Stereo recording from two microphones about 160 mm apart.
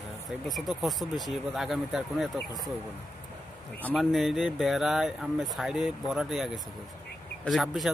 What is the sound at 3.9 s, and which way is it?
Speech, centre (ahead or behind).